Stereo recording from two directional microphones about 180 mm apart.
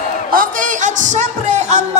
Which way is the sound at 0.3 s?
50° right (ahead or behind).